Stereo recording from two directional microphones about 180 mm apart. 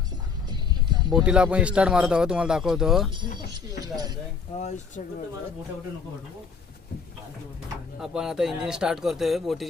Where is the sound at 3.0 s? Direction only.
25° right (ahead or behind).